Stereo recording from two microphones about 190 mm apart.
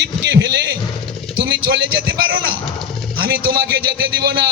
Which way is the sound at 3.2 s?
55° right (ahead or behind).